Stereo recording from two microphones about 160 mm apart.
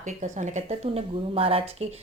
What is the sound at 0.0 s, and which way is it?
Speech, 50° right (ahead or behind).